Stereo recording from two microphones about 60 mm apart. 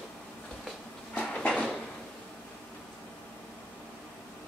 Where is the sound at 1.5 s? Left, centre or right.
Centre.